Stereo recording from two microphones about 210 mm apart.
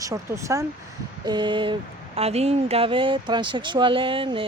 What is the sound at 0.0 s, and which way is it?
Speech, 15° right (ahead or behind).